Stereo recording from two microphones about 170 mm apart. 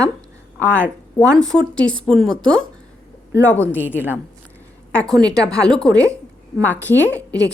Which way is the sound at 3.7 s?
10° right (ahead or behind).